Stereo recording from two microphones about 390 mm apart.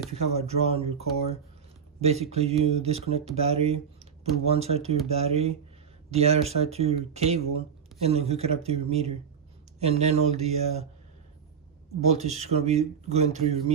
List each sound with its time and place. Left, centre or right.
0.1 s speech: centre
2.0 s speech: centre
12.1 s speech: centre